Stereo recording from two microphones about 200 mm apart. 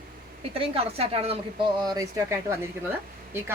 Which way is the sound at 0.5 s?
30° right (ahead or behind).